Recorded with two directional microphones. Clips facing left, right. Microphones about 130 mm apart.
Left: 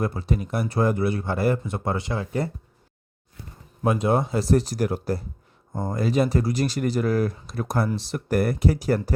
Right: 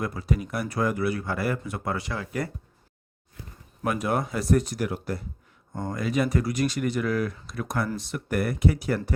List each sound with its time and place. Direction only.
0.0 s speech: 30° left (ahead or behind)
3.8 s speech: 25° left (ahead or behind)